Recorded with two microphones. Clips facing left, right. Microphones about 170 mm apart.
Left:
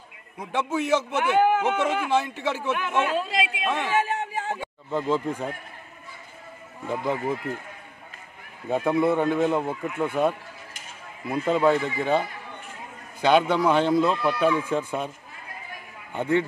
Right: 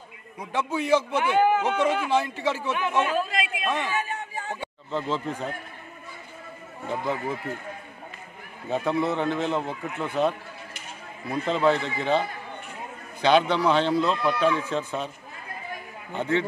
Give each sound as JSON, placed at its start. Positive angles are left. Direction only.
{"t": 0.4, "sound": "a man's voice", "side_deg": 5}
{"t": 3.9, "sound": "a sound", "side_deg": 90}
{"t": 4.9, "sound": "speech", "side_deg": 10}
{"t": 6.9, "sound": "speech", "side_deg": 15}
{"t": 8.6, "sound": "speech", "side_deg": 10}
{"t": 16.1, "sound": "speech", "side_deg": 10}